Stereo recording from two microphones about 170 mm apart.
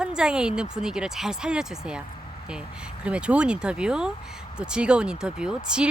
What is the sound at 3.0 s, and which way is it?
Speech, 5° right (ahead or behind).